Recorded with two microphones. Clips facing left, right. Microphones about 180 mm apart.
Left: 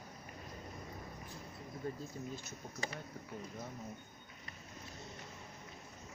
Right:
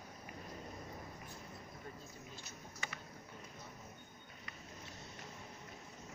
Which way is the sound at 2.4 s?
40° left (ahead or behind).